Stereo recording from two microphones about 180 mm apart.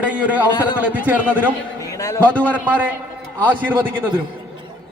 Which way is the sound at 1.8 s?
20° left (ahead or behind).